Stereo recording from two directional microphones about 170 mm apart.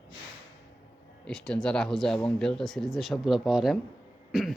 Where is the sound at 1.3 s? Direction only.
5° left (ahead or behind).